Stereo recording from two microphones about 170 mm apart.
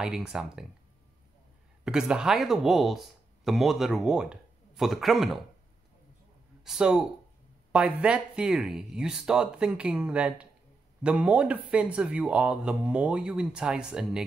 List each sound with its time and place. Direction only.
0.0 s speech: 5° right (ahead or behind)
1.9 s speech: 5° right (ahead or behind)
6.6 s speech: 5° right (ahead or behind)